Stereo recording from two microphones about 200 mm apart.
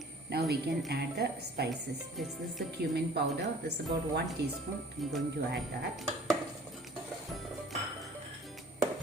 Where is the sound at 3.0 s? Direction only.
55° right (ahead or behind).